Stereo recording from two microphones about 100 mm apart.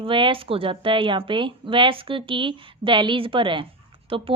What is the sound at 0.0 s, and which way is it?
A woman's voice, 60° right (ahead or behind).